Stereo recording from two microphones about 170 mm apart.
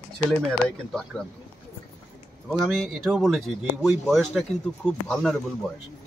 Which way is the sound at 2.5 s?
Centre (ahead or behind).